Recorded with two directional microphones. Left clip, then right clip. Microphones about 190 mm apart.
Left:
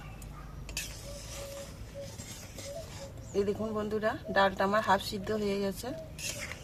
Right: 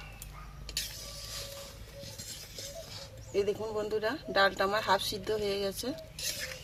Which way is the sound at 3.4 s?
35° right (ahead or behind).